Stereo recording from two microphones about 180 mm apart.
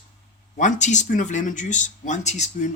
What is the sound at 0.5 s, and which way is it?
Speech, 40° left (ahead or behind).